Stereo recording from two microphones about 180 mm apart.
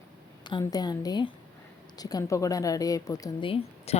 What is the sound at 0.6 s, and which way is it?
A woman's voice, 20° left (ahead or behind).